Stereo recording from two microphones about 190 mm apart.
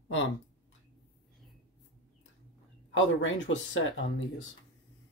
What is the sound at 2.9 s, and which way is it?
Speech, 75° left (ahead or behind).